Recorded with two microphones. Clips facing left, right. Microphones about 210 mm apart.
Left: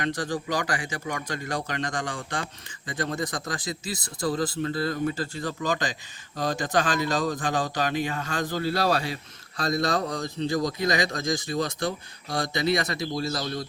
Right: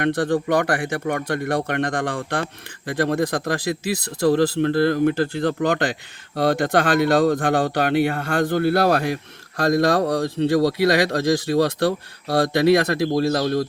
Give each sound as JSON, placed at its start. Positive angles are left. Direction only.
{"t": 0.0, "sound": "speech", "side_deg": -60}
{"t": 10.1, "sound": "speech", "side_deg": -65}